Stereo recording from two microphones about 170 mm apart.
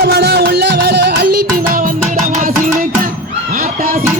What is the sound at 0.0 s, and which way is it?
Music, 75° right (ahead or behind).